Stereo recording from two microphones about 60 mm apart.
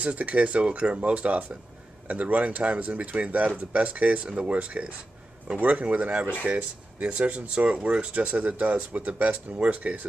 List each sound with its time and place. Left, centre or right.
0.0 s speech: right